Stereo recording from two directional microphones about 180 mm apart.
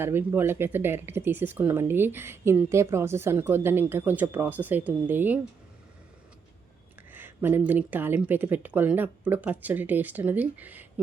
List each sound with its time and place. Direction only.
0.0 s speech: 15° right (ahead or behind)
7.1 s speech: 10° right (ahead or behind)